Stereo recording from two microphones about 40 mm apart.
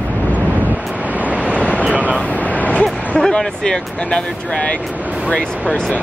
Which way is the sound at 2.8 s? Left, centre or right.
Left.